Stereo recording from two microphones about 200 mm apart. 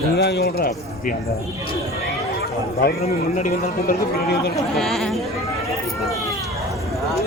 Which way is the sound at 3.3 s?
40° left (ahead or behind).